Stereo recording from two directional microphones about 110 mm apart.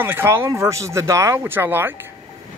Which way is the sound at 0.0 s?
20° right (ahead or behind).